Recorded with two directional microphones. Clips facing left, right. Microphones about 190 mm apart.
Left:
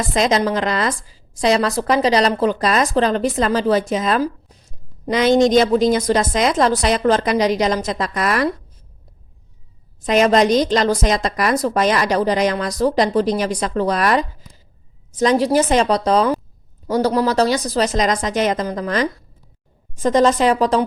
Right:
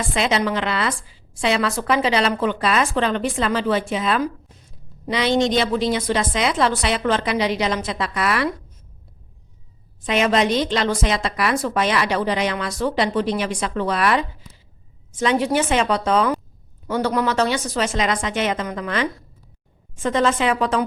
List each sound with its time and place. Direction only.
0.0 s a woman's voice: 40° left (ahead or behind)
10.0 s a woman's voice: 40° left (ahead or behind)